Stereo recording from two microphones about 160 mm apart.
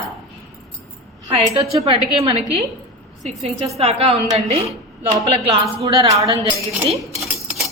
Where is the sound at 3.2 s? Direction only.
45° right (ahead or behind).